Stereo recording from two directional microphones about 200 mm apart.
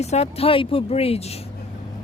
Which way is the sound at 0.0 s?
30° left (ahead or behind).